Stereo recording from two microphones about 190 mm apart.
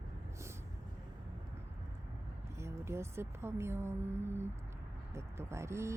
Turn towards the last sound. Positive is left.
turn(degrees=-15)  # may be behind; listen again after turning